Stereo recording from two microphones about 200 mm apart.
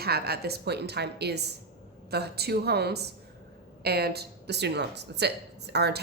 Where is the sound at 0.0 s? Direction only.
50° right (ahead or behind).